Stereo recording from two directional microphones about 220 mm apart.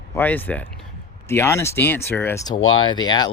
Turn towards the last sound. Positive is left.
turn(degrees=20)  # may be behind; listen again after turning